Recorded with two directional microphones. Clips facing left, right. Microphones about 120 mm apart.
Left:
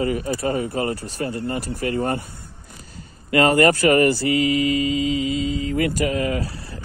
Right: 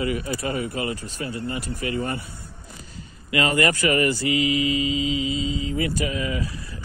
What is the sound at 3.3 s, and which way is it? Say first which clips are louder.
Speech: left 6 dB; 45° left (ahead or behind).